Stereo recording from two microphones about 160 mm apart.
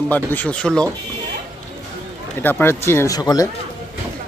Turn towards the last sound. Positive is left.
turn(degrees=25)  # may be behind; listen again after turning